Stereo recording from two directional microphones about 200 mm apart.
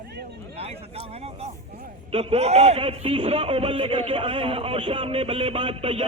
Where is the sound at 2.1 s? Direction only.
30° right (ahead or behind).